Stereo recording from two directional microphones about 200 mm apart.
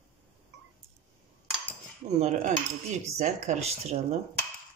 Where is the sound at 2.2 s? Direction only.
35° right (ahead or behind).